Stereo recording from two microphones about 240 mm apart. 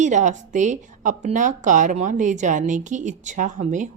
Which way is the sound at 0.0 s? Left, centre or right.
Right.